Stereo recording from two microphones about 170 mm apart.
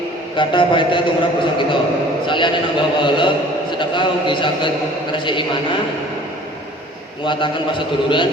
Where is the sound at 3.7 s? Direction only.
30° left (ahead or behind).